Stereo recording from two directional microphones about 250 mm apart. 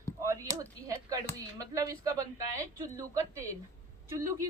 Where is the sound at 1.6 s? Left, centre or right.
Centre.